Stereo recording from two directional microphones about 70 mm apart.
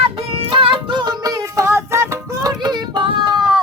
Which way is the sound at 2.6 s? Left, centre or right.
Right.